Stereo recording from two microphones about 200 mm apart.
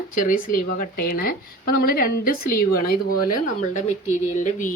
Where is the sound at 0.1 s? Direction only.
40° left (ahead or behind).